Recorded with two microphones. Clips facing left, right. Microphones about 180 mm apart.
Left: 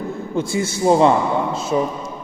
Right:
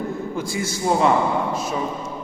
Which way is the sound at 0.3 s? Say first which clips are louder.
Left 5 dB; 25° left (ahead or behind).